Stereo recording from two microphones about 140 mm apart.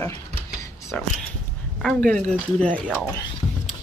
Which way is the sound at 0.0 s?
25° left (ahead or behind).